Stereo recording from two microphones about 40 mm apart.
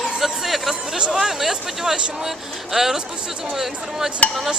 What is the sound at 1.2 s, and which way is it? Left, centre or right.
Speech, centre.